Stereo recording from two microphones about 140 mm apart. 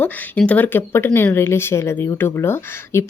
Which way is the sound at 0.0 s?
10° left (ahead or behind).